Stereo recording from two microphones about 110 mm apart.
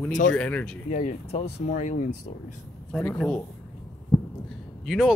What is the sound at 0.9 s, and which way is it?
Speech, 85° left.